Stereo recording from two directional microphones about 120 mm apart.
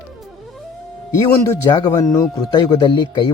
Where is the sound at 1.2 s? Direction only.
35° left (ahead or behind).